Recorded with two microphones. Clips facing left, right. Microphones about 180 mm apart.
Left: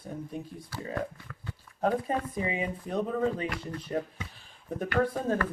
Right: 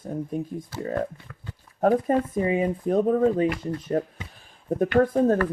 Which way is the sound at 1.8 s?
45° right (ahead or behind).